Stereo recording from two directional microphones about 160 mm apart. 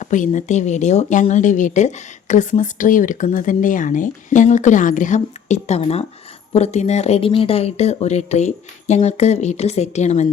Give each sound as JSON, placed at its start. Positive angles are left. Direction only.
{"t": 0.0, "sound": "speech", "side_deg": 50}